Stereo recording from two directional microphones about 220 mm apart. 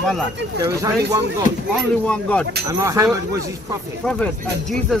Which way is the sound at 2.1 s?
5° left (ahead or behind).